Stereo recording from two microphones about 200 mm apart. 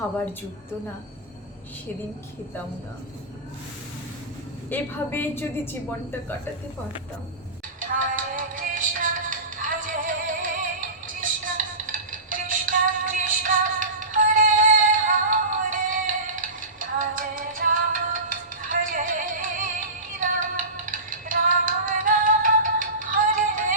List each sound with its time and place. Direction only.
4.7 s a woman's voice: 10° left (ahead or behind)
7.8 s music: 40° right (ahead or behind)